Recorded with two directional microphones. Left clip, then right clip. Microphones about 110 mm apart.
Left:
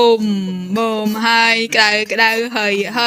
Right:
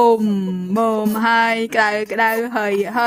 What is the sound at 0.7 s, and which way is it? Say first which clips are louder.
Speech: even; 40° right (ahead or behind).